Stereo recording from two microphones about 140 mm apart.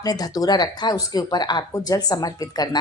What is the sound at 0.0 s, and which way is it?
A woman's voice, 25° left (ahead or behind).